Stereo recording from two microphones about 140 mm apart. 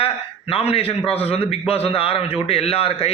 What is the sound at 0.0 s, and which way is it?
A man's voice, 45° left (ahead or behind).